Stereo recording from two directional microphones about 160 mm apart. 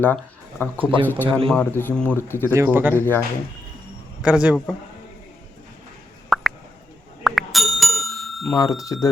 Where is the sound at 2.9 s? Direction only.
15° left (ahead or behind).